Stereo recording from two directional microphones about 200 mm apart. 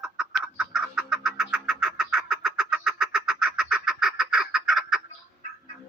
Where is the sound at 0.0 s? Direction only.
Centre (ahead or behind).